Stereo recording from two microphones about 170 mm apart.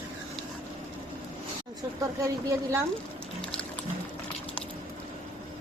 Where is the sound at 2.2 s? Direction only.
15° right (ahead or behind).